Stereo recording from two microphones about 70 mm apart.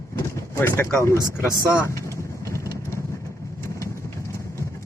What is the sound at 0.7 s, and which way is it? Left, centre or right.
Speech, left.